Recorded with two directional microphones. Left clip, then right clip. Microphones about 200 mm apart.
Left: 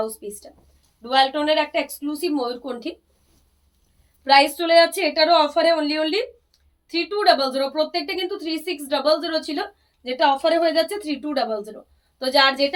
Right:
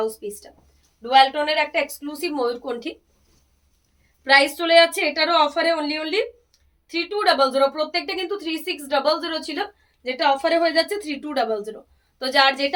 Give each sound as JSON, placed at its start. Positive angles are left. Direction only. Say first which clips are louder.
{"t": 0.0, "sound": "speech", "louder": "right 2 dB", "side_deg": -15}
{"t": 4.2, "sound": "speech", "louder": "left 1 dB", "side_deg": -10}